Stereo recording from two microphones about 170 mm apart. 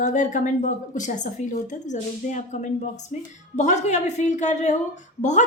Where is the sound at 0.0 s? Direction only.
50° left (ahead or behind).